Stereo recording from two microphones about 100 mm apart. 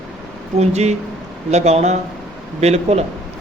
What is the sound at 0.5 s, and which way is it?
Speech, 90° right.